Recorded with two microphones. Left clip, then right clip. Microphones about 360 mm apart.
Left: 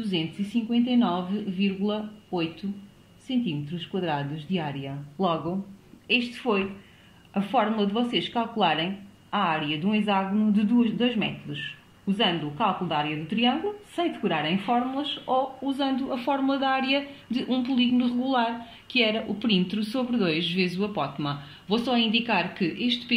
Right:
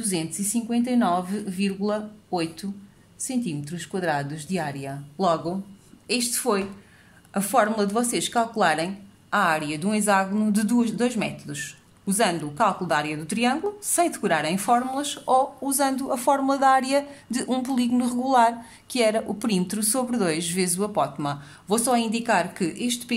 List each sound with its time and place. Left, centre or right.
0.0 s a woman's voice: right